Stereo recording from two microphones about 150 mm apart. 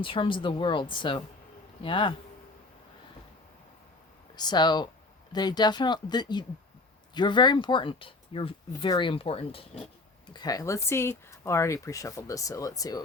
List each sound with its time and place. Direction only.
0.0 s speech: 35° left (ahead or behind)
4.4 s speech: 30° left (ahead or behind)
10.3 s speech: 25° left (ahead or behind)